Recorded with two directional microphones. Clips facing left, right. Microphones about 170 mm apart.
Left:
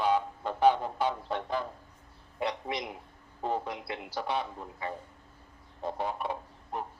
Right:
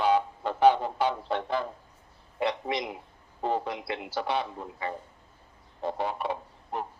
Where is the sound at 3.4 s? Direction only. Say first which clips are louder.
Right 3 dB; 90° right.